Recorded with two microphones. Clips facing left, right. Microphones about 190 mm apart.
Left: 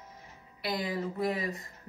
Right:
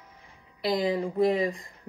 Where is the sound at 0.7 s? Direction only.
20° right (ahead or behind).